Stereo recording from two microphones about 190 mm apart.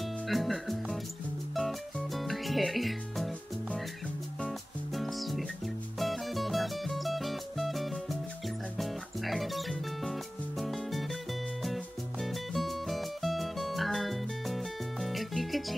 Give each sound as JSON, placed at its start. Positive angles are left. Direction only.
{"t": 0.0, "sound": "music", "side_deg": 0}